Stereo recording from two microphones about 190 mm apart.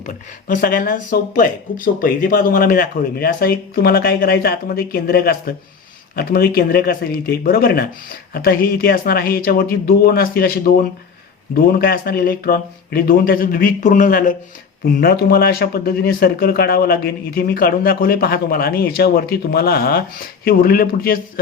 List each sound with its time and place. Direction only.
0.4 s speech: 45° left (ahead or behind)